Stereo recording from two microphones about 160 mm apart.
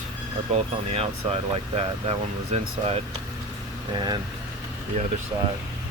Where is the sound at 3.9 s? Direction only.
30° right (ahead or behind).